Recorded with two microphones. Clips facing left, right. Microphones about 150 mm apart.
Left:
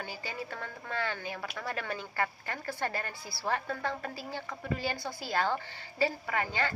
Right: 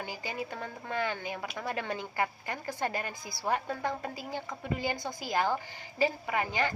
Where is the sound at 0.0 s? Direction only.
15° right (ahead or behind).